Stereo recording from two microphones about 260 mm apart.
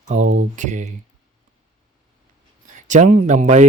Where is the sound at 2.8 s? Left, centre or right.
Right.